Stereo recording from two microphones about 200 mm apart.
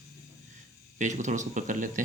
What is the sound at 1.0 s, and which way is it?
Speech, 35° right (ahead or behind).